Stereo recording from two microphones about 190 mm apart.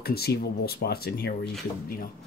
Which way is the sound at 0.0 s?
55° left (ahead or behind).